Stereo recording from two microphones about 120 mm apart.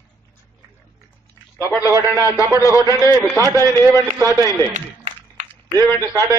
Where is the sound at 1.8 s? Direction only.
25° right (ahead or behind).